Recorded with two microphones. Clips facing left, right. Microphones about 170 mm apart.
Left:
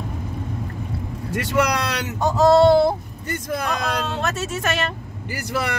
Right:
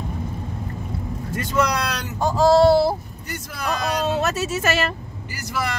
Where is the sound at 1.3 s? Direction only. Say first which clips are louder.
Left 1 dB; 70° left (ahead or behind).